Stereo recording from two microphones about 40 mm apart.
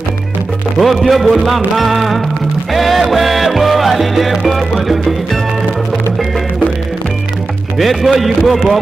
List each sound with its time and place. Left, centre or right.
0.7 s music: centre
7.7 s music: centre